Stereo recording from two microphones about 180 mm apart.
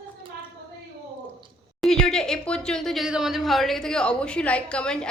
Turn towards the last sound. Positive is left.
turn(degrees=5)  # may be behind; listen again after turning